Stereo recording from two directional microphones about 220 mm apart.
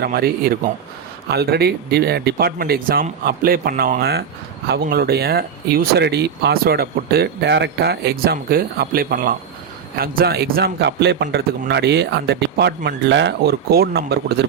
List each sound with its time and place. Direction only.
0.0 s speech: 45° right (ahead or behind)